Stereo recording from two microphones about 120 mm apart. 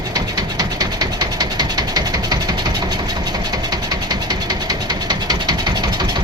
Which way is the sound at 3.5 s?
35° right (ahead or behind).